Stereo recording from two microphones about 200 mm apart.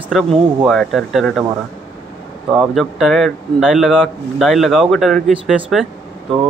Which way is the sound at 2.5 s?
Centre (ahead or behind).